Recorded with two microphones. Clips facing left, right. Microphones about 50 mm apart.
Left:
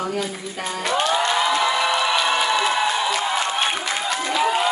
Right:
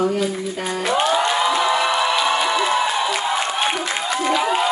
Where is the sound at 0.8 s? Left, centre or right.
Centre.